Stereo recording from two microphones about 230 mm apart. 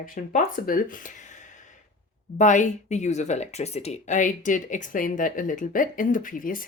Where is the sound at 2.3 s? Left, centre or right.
Left.